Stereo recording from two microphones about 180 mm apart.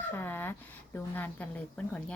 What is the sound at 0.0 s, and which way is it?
Speech, 10° left (ahead or behind).